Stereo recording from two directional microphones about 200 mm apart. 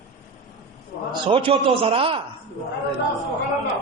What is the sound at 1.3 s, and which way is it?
Speech, 25° right (ahead or behind).